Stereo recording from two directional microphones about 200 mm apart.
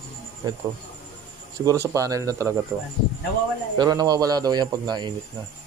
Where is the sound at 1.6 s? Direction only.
15° right (ahead or behind).